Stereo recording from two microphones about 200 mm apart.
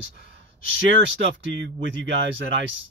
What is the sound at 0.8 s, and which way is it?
Speech, 65° right (ahead or behind).